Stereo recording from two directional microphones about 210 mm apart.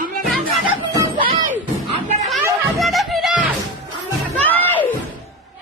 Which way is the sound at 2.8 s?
Centre (ahead or behind).